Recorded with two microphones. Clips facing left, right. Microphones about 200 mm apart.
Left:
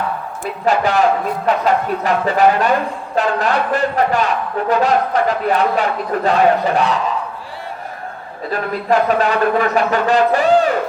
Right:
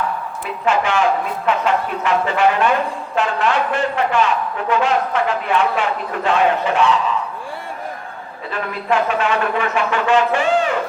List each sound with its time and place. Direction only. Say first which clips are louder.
0.6 s speech: left 3 dB; 35° left (ahead or behind)
8.4 s speech: left 4 dB; 40° left (ahead or behind)